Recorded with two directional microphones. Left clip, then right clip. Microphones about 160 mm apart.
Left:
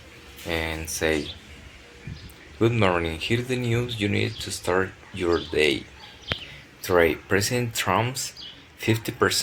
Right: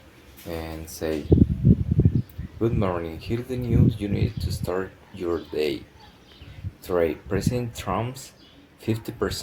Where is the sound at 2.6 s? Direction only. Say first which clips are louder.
Left 4 dB; centre (ahead or behind).